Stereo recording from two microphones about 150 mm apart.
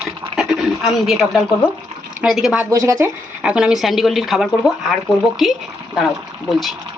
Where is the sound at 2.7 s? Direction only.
20° right (ahead or behind).